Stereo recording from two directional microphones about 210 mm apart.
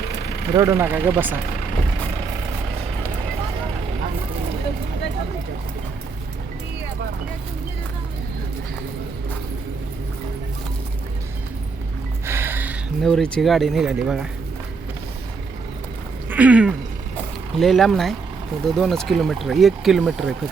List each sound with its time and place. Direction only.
0.5 s speech: 15° right (ahead or behind)
12.2 s music: 10° right (ahead or behind)
13.1 s speech: 5° left (ahead or behind)
16.3 s a sound: 5° right (ahead or behind)
17.6 s speech: centre (ahead or behind)